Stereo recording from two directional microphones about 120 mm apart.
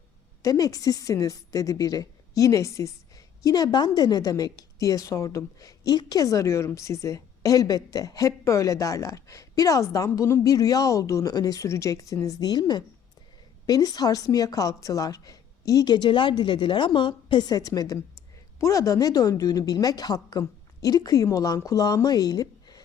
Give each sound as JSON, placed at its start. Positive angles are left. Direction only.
{"t": 0.4, "sound": "a woman's voice", "side_deg": 30}